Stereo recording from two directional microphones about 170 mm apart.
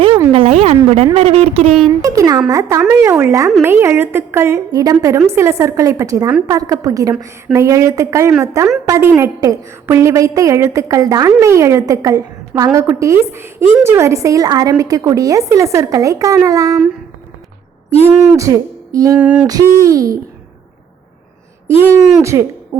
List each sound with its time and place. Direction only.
0.3 s a sound: 35° right (ahead or behind)
0.9 s speech: 35° right (ahead or behind)
2.0 s a woman's voice: 20° right (ahead or behind)
18.0 s a woman's voice: 20° right (ahead or behind)
19.1 s a sound: 5° right (ahead or behind)
19.5 s a woman's voice: 20° right (ahead or behind)
21.7 s a woman's voice: 15° right (ahead or behind)